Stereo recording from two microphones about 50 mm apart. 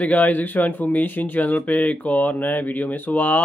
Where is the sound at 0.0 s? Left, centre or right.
Left.